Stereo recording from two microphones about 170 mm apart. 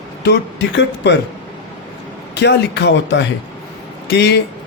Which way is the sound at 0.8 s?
90° left.